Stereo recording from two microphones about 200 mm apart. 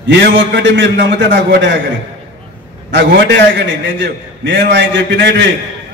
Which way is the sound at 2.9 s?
60° right (ahead or behind).